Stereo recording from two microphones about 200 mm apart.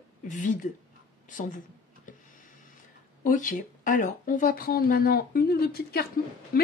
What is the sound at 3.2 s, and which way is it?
Speech, 40° left (ahead or behind).